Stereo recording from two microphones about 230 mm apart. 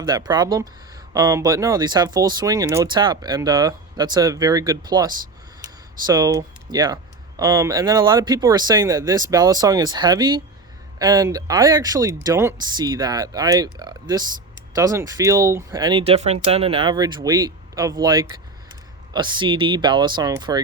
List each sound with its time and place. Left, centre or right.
0.0 s speech: centre